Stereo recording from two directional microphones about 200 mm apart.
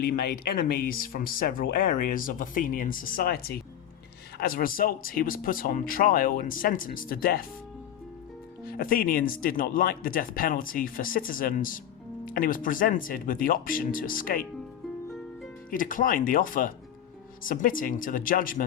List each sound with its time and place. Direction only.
0.0 s speech: 50° left (ahead or behind)
8.6 s speech: 45° left (ahead or behind)
15.7 s speech: 45° left (ahead or behind)